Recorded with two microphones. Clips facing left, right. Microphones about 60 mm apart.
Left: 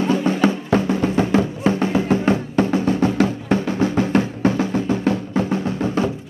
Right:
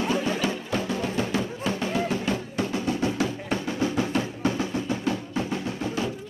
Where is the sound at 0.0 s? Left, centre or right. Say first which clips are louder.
Left 8 dB; left.